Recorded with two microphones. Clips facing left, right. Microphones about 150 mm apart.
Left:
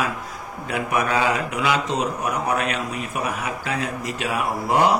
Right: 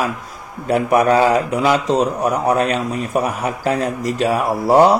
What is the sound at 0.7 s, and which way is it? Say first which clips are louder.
A man's voice: right 9 dB; 35° right (ahead or behind).